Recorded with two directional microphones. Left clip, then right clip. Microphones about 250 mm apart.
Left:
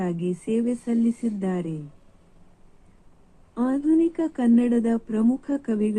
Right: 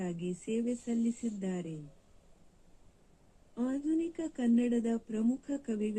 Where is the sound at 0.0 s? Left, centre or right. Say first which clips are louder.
Left 11 dB; centre.